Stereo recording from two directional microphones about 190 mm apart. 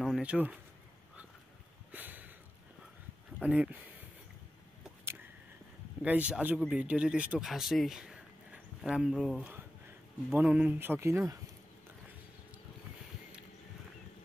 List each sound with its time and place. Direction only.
0.0 s speech: 5° right (ahead or behind)
1.9 s a sound: 10° right (ahead or behind)
3.3 s speech: 5° right (ahead or behind)
6.0 s speech: 5° right (ahead or behind)